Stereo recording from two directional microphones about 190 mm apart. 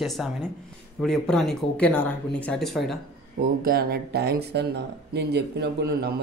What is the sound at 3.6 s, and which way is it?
Speech, 55° right (ahead or behind).